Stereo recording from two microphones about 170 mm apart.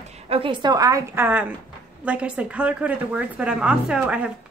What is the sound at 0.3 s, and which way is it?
A woman's voice, 30° right (ahead or behind).